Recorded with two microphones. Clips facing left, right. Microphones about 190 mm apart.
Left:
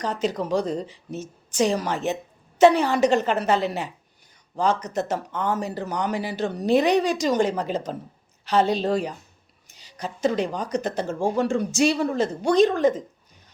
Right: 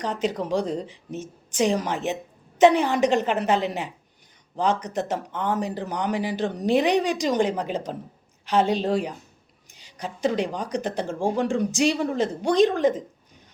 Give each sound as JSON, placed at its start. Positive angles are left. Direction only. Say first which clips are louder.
{"t": 0.0, "sound": "speech", "louder": "left 1 dB", "side_deg": -15}